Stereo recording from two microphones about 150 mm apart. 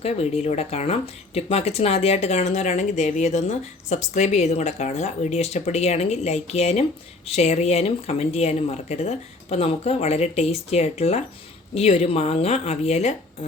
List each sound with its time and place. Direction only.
0.0 s speech: 45° left (ahead or behind)